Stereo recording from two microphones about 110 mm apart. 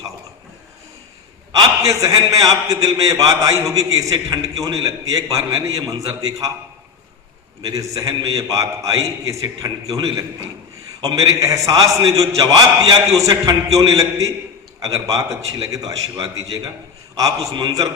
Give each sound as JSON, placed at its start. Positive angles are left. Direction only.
{"t": 1.5, "sound": "a man's voice", "side_deg": -30}
{"t": 7.7, "sound": "a man's voice", "side_deg": -30}